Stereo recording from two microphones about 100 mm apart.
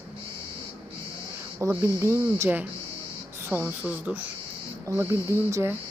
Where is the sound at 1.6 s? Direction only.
25° right (ahead or behind).